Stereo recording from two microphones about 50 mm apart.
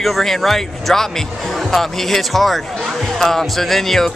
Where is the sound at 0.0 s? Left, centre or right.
Centre.